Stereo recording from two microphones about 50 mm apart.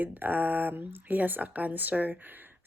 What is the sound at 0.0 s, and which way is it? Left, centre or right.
Speech, right.